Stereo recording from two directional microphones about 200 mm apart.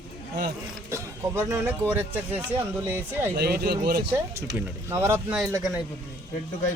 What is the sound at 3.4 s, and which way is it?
Speech, 55° right (ahead or behind).